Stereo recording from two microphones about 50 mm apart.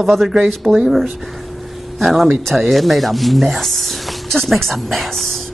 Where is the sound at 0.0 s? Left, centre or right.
Centre.